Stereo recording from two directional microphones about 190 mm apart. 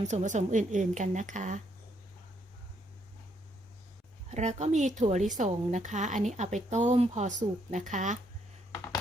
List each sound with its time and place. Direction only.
0.1 s a woman's voice: 40° right (ahead or behind)
4.3 s a woman's voice: 35° right (ahead or behind)